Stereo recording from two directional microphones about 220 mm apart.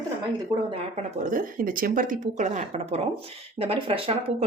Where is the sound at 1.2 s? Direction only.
40° right (ahead or behind).